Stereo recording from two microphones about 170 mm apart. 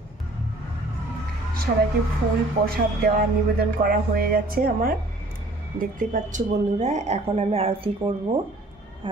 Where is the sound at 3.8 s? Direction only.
60° right (ahead or behind).